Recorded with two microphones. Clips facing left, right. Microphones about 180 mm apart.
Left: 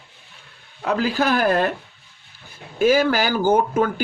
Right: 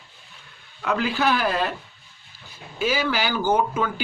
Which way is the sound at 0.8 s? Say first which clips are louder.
Left 2 dB; 40° left (ahead or behind).